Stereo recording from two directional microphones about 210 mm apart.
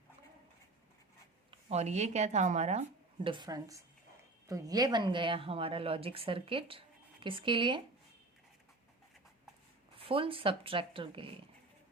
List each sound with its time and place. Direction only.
1.5 s speech: 30° right (ahead or behind)
3.2 s a woman's voice: 20° right (ahead or behind)
10.0 s a woman's voice: 25° right (ahead or behind)